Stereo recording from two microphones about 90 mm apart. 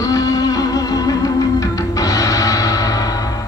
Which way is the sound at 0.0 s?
40° left (ahead or behind).